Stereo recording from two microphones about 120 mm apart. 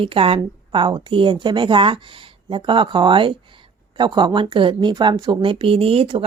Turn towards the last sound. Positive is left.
turn(degrees=-50)  # may be behind; listen again after turning